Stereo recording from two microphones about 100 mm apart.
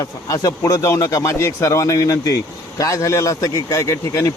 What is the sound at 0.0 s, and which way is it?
A man's voice, 35° left (ahead or behind).